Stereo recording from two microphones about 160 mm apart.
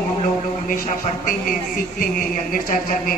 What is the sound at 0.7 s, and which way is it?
A man's voice, 60° left (ahead or behind).